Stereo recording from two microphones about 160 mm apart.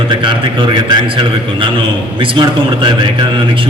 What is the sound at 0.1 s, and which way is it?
A man's voice, 30° right (ahead or behind).